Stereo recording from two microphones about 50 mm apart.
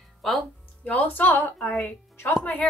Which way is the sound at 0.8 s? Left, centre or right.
Left.